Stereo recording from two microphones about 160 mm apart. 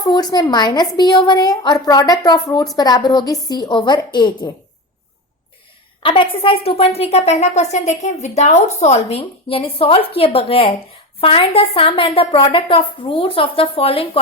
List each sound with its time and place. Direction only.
0.0 s a woman's voice: 25° left (ahead or behind)
6.0 s a woman's voice: 30° left (ahead or behind)